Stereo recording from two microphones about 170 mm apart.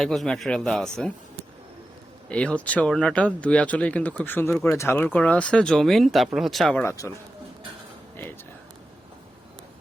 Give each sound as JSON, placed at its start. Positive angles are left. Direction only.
{"t": 0.0, "sound": "speech", "side_deg": 0}
{"t": 6.8, "sound": "speech", "side_deg": 20}